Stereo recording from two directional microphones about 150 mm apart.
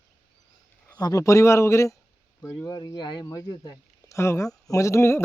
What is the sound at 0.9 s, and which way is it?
Speech, 25° left (ahead or behind).